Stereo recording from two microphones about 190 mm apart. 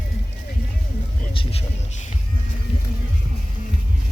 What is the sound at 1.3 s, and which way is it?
Music, 30° left (ahead or behind).